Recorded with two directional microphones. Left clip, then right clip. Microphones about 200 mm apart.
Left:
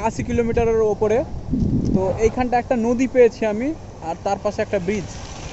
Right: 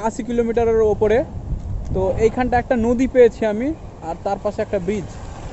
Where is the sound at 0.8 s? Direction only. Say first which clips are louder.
Right 2 dB; 25° right (ahead or behind).